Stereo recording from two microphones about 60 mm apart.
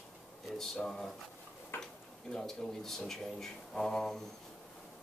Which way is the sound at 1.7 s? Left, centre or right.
Left.